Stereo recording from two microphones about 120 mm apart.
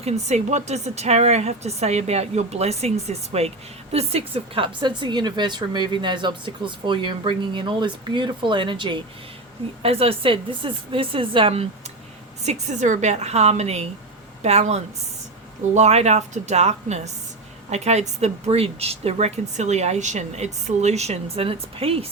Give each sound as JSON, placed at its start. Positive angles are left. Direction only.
{"t": 0.0, "sound": "speech", "side_deg": -65}
{"t": 9.8, "sound": "speech", "side_deg": -55}
{"t": 12.4, "sound": "a woman's voice", "side_deg": -75}